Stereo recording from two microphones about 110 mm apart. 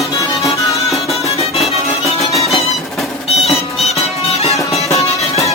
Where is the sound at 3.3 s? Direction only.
70° left (ahead or behind).